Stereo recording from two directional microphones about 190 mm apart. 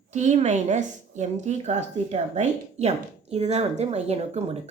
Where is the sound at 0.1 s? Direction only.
40° right (ahead or behind).